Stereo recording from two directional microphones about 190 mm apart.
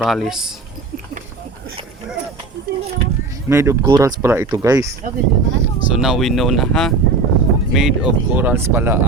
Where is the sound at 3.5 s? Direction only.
15° right (ahead or behind).